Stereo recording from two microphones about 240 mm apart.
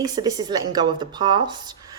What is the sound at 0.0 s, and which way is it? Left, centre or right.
Speech, centre.